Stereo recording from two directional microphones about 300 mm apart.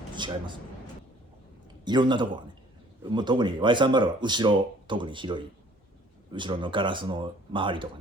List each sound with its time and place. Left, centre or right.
0.2 s speech: centre
1.8 s a man's voice: centre